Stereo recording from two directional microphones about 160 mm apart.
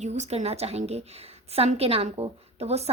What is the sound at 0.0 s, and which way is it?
A woman's voice, 45° right (ahead or behind).